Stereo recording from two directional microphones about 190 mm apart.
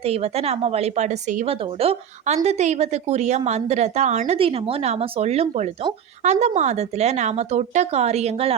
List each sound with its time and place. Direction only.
0.0 s speech: 35° right (ahead or behind)